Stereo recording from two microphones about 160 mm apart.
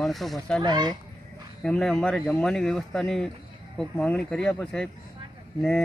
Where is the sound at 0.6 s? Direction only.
25° right (ahead or behind).